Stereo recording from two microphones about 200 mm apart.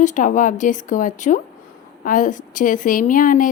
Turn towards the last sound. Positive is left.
turn(degrees=40)  # may be behind; listen again after turning